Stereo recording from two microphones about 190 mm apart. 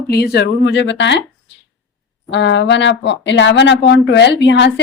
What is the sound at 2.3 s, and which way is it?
A woman's voice, 70° left (ahead or behind).